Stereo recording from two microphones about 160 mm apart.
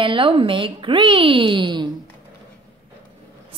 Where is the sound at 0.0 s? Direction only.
30° right (ahead or behind).